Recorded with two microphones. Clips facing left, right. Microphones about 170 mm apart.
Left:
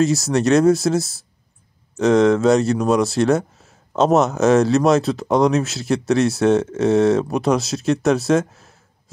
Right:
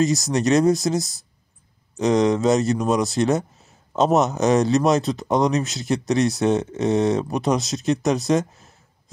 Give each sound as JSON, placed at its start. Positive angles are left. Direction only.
{"t": 0.0, "sound": "speech", "side_deg": 0}